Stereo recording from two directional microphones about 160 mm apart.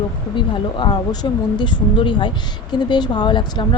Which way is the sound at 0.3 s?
30° left (ahead or behind).